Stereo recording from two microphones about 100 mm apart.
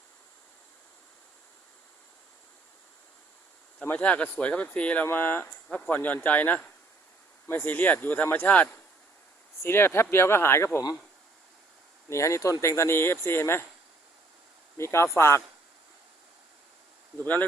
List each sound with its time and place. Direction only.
3.8 s speech: 15° left (ahead or behind)
12.0 s speech: 30° left (ahead or behind)
14.8 s speech: 30° left (ahead or behind)